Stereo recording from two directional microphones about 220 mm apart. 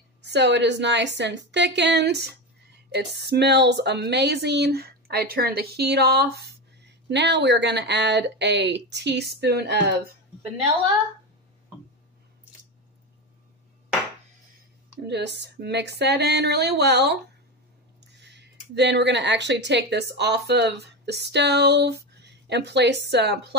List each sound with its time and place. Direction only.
0.2 s speech: 50° right (ahead or behind)
15.0 s speech: 50° right (ahead or behind)
18.2 s speech: 50° right (ahead or behind)